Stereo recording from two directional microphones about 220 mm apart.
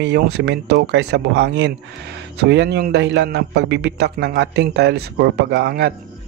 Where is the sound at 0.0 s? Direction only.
50° right (ahead or behind).